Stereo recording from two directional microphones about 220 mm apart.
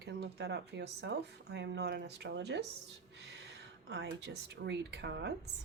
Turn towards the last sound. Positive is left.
turn(degrees=-50)  # may be behind; listen again after turning